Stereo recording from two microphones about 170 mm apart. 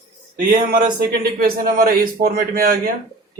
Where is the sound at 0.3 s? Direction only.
55° right (ahead or behind).